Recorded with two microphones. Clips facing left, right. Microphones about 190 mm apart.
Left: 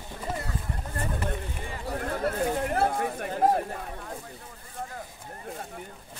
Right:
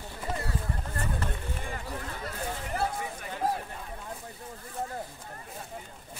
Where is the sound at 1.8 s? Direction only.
55° left (ahead or behind).